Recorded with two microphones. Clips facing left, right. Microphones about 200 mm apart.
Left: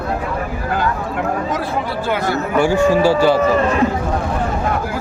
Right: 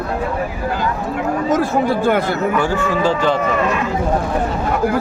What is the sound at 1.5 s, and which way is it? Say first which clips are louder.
Speech: right 6 dB; 50° right (ahead or behind).